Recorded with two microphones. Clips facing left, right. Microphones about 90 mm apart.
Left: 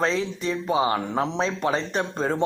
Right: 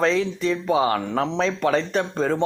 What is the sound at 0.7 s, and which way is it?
Mantra, 20° left (ahead or behind).